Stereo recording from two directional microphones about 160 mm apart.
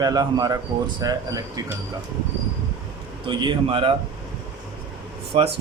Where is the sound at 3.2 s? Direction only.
30° right (ahead or behind).